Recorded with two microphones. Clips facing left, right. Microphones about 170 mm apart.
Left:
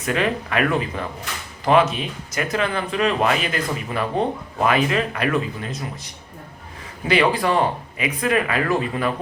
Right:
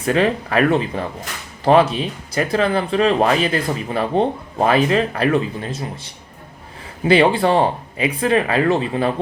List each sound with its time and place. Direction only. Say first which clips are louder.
0.0 s speech: right 5 dB; 30° right (ahead or behind)
7.1 s speech: right 5 dB; 30° right (ahead or behind)